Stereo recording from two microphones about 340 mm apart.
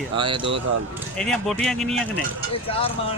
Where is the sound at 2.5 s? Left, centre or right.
Centre.